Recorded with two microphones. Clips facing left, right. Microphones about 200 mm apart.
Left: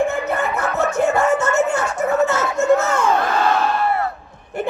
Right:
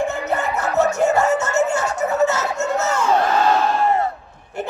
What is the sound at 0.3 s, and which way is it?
Music, 55° left (ahead or behind).